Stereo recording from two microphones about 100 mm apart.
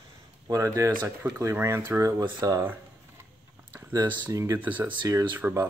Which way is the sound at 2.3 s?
45° right (ahead or behind).